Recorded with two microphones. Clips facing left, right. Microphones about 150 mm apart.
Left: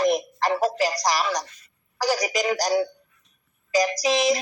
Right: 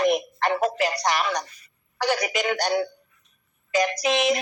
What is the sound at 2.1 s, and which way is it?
Speech, 35° left (ahead or behind).